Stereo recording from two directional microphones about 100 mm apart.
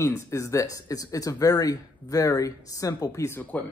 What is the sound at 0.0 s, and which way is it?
Speech, 30° left (ahead or behind).